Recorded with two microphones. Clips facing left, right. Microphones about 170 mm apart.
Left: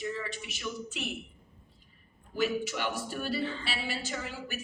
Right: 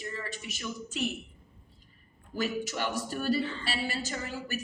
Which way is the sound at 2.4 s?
45° right (ahead or behind).